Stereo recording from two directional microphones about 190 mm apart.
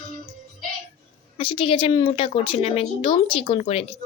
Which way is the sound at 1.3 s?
30° left (ahead or behind).